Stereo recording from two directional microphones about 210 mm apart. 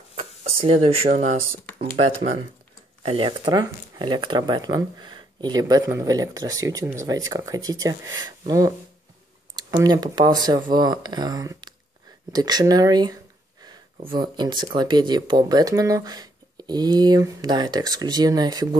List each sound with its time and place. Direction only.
0.1 s a sound: 30° right (ahead or behind)
1.0 s speech: 40° right (ahead or behind)
3.0 s speech: 25° right (ahead or behind)